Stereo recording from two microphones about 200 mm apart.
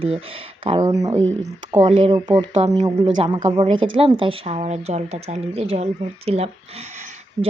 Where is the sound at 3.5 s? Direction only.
25° right (ahead or behind).